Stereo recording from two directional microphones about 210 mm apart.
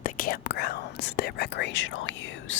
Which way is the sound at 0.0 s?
45° left (ahead or behind).